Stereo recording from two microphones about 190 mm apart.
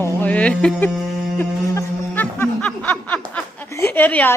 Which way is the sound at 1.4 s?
10° left (ahead or behind).